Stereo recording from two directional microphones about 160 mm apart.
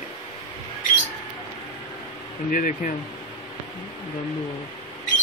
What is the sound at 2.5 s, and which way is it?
Speech, 55° left (ahead or behind).